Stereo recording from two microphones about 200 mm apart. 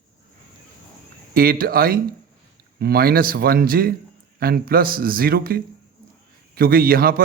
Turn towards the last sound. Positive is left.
turn(degrees=-45)  # may be behind; listen again after turning